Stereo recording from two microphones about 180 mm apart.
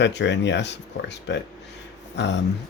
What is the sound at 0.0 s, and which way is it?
Speech, 75° left (ahead or behind).